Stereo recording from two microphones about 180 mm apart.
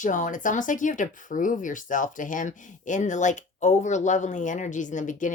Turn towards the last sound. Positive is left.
turn(degrees=45)  # may be behind; listen again after turning